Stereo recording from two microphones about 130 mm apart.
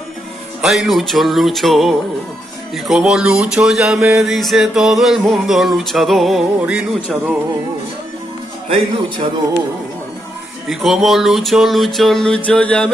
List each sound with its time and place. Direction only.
0.6 s speech: 5° right (ahead or behind)
8.6 s a man's voice: 45° right (ahead or behind)
10.7 s speech: centre (ahead or behind)
12.4 s mantra: 10° left (ahead or behind)